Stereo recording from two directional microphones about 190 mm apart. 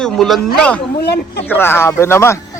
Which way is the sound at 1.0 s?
60° left (ahead or behind).